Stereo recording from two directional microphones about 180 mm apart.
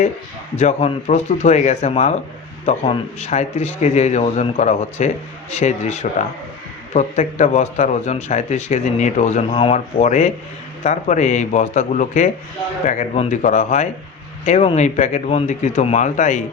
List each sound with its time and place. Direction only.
0.5 s a man's voice: 40° left (ahead or behind)